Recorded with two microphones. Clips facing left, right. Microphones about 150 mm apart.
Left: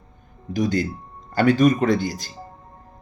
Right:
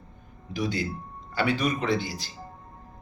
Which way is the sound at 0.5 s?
45° left (ahead or behind).